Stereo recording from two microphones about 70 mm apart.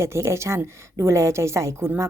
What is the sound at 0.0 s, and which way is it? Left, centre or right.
A woman's voice, right.